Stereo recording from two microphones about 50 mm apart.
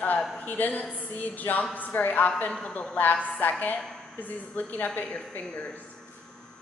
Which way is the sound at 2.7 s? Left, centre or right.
Left.